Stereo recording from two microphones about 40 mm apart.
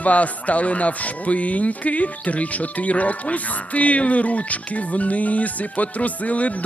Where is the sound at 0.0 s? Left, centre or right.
Left.